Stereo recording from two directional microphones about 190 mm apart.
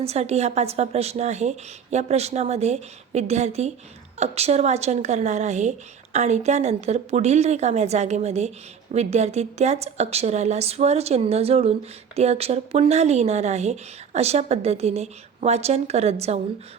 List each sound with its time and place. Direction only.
0.0 s a woman's voice: 35° right (ahead or behind)